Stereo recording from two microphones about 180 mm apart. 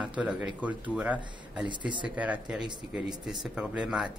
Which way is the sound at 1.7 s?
25° right (ahead or behind).